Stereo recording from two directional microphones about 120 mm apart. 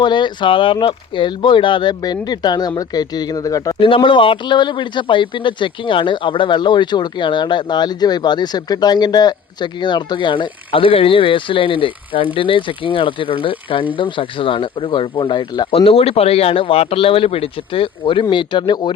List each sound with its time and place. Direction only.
0.0 s speech: 40° left (ahead or behind)
3.8 s speech: 45° left (ahead or behind)